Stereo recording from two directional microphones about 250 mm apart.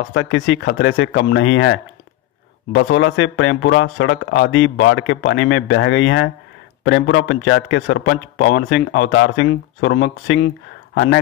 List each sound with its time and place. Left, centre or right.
0.1 s speech: left